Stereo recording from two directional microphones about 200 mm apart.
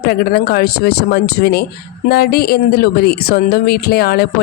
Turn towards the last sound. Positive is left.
turn(degrees=50)  # may be behind; listen again after turning